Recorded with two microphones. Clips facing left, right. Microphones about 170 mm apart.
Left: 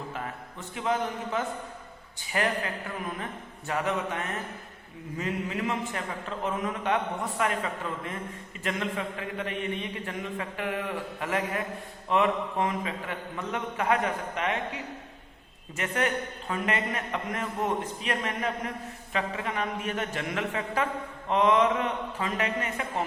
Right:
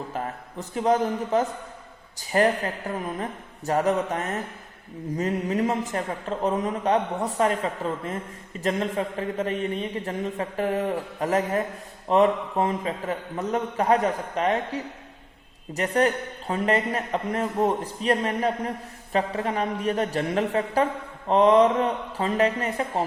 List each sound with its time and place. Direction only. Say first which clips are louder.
0.1 s a man's voice: right 5 dB; 40° right (ahead or behind)